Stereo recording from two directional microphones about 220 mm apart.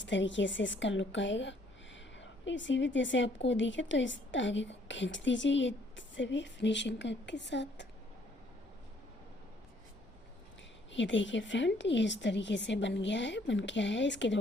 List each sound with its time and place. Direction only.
0.0 s a woman's voice: 55° left (ahead or behind)
10.9 s a woman's voice: 55° left (ahead or behind)